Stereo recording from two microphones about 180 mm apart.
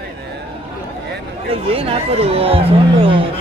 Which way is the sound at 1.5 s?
30° right (ahead or behind).